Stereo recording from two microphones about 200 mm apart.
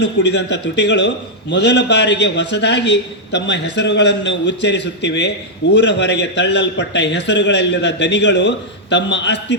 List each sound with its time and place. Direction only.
0.0 s a man's voice: 60° left (ahead or behind)